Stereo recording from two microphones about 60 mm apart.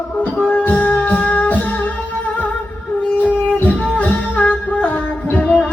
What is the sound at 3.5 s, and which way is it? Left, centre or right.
Music, left.